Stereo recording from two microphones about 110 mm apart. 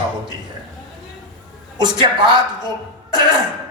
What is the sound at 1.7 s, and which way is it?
Speech, 40° right (ahead or behind).